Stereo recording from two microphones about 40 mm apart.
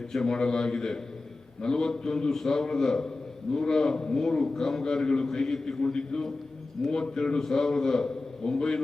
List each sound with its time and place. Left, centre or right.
0.1 s a man's voice: centre